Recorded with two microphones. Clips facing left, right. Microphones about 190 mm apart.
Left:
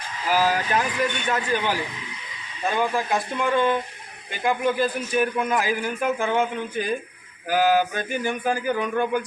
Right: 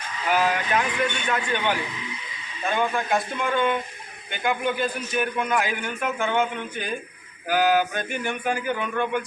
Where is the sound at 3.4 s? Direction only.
30° left (ahead or behind).